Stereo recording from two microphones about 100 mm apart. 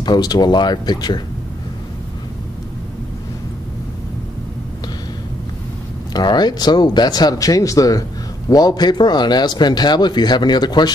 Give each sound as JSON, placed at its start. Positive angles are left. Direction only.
{"t": 0.0, "sound": "a man's voice", "side_deg": 45}
{"t": 6.1, "sound": "a man's voice", "side_deg": 45}